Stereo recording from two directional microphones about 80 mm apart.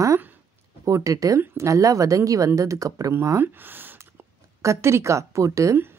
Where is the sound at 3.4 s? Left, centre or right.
Right.